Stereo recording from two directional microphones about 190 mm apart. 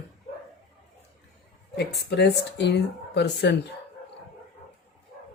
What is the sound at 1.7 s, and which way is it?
Speech, 60° left (ahead or behind).